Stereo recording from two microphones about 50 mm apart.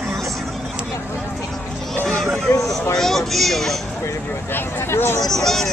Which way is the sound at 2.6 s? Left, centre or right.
Centre.